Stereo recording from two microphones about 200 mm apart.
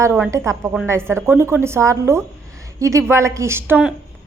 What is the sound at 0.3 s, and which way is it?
A woman's voice, 15° right (ahead or behind).